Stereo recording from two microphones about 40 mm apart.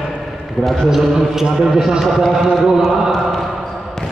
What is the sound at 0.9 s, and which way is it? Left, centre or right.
A man's voice, centre.